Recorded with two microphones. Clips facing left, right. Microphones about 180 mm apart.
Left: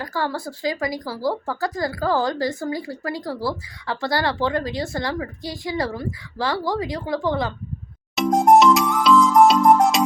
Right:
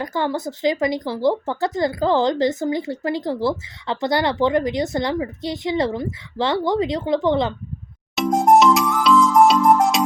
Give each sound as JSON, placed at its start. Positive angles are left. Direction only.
{"t": 0.0, "sound": "speech", "side_deg": -20}
{"t": 8.1, "sound": "music", "side_deg": 0}